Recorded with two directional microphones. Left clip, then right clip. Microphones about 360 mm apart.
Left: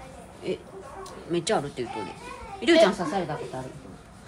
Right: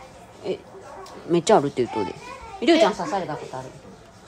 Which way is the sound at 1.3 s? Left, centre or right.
Centre.